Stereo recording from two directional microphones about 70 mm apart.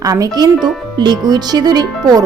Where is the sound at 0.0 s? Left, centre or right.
Right.